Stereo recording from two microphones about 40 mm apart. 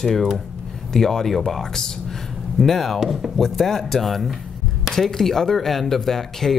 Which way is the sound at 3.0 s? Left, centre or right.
Centre.